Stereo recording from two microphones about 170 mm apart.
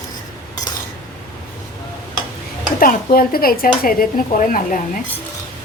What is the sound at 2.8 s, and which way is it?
Speech, 60° left (ahead or behind).